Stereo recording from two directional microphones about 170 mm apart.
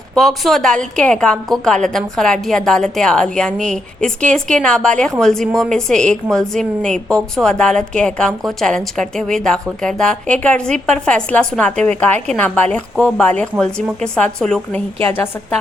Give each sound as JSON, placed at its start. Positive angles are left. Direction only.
{"t": 0.1, "sound": "a woman's voice", "side_deg": 0}